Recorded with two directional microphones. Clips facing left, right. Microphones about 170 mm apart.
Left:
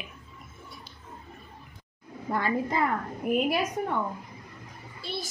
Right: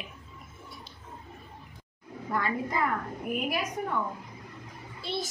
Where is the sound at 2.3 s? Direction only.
30° left (ahead or behind).